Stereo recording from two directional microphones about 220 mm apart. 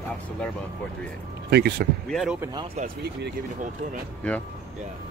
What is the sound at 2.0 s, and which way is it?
Speech, centre (ahead or behind).